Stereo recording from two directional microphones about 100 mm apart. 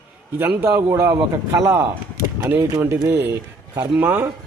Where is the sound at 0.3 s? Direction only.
20° right (ahead or behind).